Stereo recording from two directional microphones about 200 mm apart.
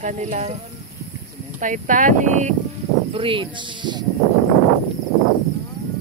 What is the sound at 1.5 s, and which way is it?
Speech, 40° right (ahead or behind).